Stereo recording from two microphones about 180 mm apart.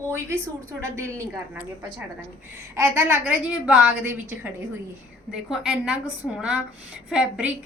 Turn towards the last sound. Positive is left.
turn(degrees=-5)  # may be behind; listen again after turning